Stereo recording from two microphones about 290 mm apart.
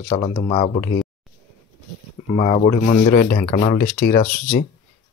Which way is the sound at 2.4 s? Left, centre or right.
Left.